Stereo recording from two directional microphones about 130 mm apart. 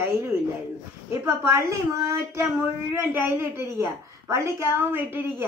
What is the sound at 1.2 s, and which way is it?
A woman's voice, 20° right (ahead or behind).